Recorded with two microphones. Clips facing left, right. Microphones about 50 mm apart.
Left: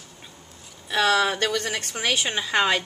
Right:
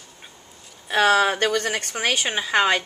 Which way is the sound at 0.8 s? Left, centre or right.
Right.